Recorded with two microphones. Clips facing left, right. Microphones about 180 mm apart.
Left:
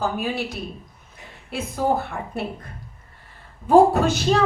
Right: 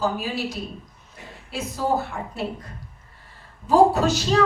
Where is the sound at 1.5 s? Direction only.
55° left (ahead or behind).